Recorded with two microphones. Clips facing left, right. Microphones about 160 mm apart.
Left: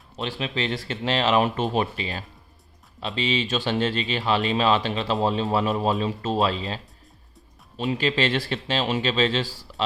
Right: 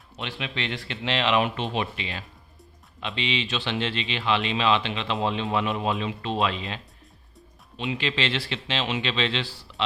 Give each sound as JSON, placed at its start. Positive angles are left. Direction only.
{"t": 0.2, "sound": "a man's voice", "side_deg": 35}